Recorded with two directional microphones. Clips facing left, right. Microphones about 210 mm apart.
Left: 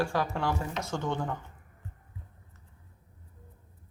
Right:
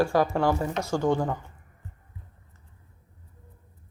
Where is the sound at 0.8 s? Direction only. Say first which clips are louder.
Right 8 dB; 35° right (ahead or behind).